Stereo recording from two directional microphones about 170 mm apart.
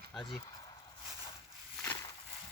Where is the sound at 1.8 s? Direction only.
15° left (ahead or behind).